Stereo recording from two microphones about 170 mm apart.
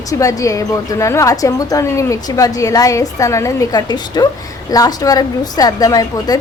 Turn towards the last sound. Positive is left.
turn(degrees=20)  # may be behind; listen again after turning